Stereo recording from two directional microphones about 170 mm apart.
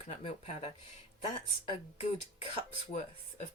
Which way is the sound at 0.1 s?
35° left (ahead or behind).